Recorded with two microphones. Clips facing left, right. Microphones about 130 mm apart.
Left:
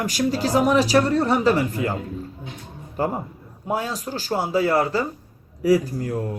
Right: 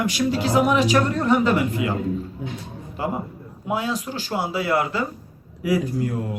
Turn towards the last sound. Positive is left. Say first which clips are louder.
# left 3 dB
turn(degrees=35)  # may be behind; listen again after turning